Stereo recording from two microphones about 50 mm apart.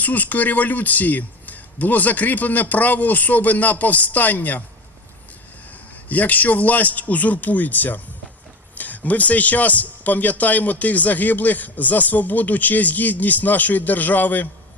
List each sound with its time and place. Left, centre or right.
0.0 s a man's voice: left
6.1 s a man's voice: left